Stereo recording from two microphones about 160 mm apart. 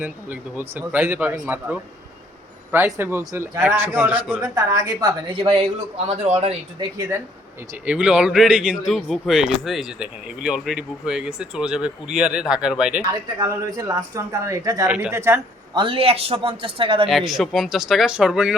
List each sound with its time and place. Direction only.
0.0 s speech: 10° right (ahead or behind)
2.7 s speech: 15° right (ahead or behind)
4.4 s a woman's voice: 20° right (ahead or behind)
5.4 s a man's voice: 35° right (ahead or behind)
6.9 s speech: 15° right (ahead or behind)
7.9 s speech: 5° right (ahead or behind)
13.4 s a woman's voice: 20° right (ahead or behind)
14.8 s speech: 5° right (ahead or behind)
15.7 s a man's voice: 30° right (ahead or behind)
17.1 s speech: centre (ahead or behind)